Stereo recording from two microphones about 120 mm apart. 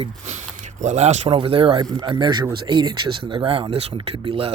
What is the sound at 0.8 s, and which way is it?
Speech, 75° right (ahead or behind).